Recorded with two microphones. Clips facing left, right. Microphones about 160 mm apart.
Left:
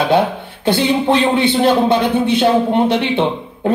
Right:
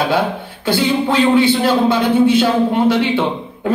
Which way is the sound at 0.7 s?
20° left (ahead or behind).